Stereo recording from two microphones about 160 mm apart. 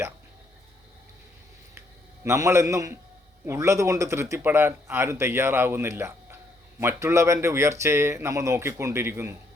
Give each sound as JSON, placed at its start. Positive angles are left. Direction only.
{"t": 2.2, "sound": "a man's voice", "side_deg": -20}